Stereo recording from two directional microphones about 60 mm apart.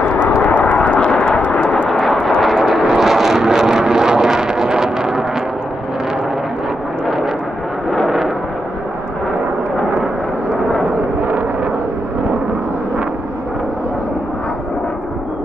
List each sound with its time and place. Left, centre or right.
0.0 s vehicle: left; by 1.9 s centre
1.9 s vehicle: centre
11.2 s a sound: right